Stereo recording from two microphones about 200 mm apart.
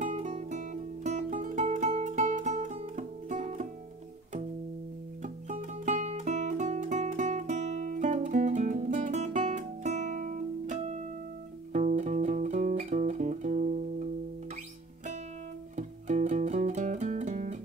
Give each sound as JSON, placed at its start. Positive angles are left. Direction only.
{"t": 0.0, "sound": "music", "side_deg": -40}
{"t": 5.2, "sound": "music", "side_deg": -40}
{"t": 15.7, "sound": "music", "side_deg": -35}